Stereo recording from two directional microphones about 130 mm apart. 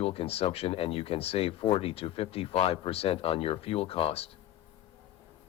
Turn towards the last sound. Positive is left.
turn(degrees=45)  # may be behind; listen again after turning